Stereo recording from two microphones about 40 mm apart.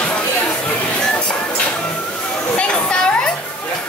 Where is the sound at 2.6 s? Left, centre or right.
Left.